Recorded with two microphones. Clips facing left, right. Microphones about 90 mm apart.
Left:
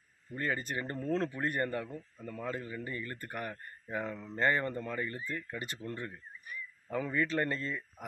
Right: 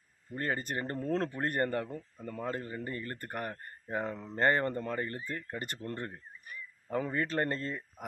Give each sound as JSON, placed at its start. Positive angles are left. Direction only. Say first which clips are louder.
{"t": 0.3, "sound": "speech", "louder": "right 1 dB", "side_deg": -45}